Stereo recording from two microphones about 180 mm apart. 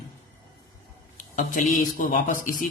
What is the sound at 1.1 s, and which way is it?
A man's voice, 45° left (ahead or behind).